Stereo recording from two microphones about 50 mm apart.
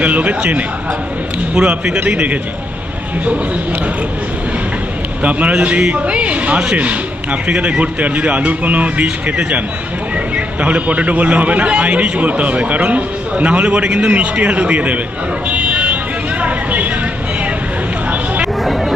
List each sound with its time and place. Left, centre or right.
0.0 s a man's voice: right
1.5 s a man's voice: centre
5.2 s a man's voice: right
15.4 s buzzer: right
16.4 s a sound: right
18.6 s chatter: centre